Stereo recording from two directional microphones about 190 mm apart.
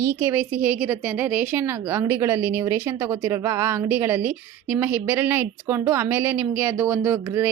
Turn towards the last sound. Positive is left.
turn(degrees=-10)  # may be behind; listen again after turning